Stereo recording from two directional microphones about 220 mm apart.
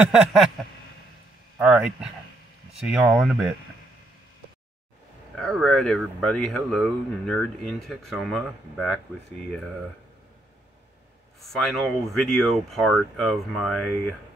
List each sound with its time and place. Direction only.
0.0 s speech: centre (ahead or behind)
1.6 s speech: 5° right (ahead or behind)
5.3 s speech: centre (ahead or behind)
11.4 s speech: centre (ahead or behind)